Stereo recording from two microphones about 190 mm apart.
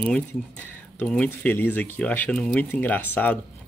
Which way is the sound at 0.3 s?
10° left (ahead or behind).